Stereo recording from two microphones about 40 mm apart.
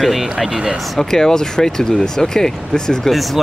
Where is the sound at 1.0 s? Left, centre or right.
Centre.